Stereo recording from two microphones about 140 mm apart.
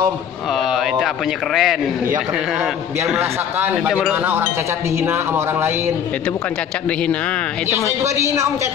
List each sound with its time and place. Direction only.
0.6 s a man's voice: centre (ahead or behind)
3.1 s speech: 15° right (ahead or behind)